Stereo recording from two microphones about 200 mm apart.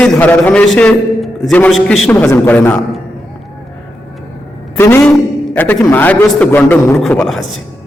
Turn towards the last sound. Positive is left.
turn(degrees=5)  # may be behind; listen again after turning